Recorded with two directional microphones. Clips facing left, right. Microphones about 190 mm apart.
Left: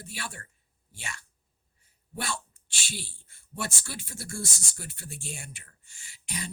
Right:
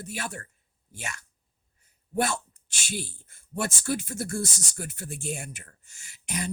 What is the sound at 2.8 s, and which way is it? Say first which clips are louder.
Speech: right 6 dB; 45° right (ahead or behind).